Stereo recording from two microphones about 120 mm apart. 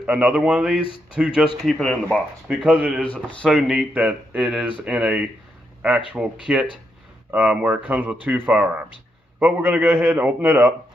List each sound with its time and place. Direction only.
0.0 s speech: 10° right (ahead or behind)
1.6 s speech: 5° left (ahead or behind)
2.4 s speech: 10° right (ahead or behind)
3.0 s speech: 10° left (ahead or behind)
3.4 s speech: centre (ahead or behind)